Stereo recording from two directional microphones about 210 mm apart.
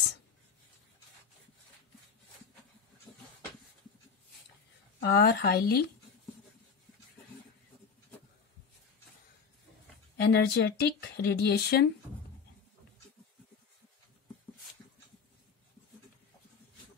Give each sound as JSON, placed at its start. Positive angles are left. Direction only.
{"t": 5.0, "sound": "speech", "side_deg": 50}
{"t": 10.2, "sound": "speech", "side_deg": 55}